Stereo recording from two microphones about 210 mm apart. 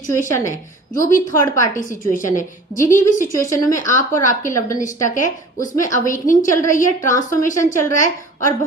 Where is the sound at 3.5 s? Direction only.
15° left (ahead or behind).